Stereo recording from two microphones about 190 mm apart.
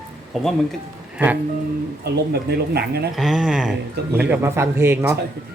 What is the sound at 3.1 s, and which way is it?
A man's voice, centre (ahead or behind).